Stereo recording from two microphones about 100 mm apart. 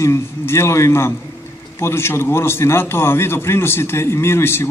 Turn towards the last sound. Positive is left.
turn(degrees=25)  # may be behind; listen again after turning